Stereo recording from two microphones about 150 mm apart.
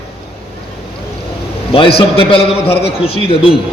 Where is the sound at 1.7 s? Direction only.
40° left (ahead or behind).